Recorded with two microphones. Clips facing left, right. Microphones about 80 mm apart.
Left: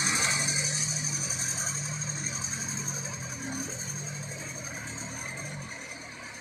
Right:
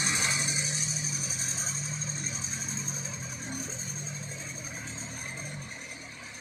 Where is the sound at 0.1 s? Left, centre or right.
Left.